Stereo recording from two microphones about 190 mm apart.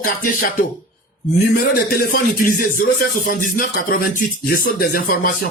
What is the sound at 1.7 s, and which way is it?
Speech, 50° left (ahead or behind).